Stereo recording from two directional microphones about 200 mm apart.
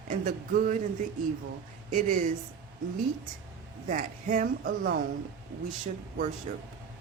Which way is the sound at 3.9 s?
40° right (ahead or behind).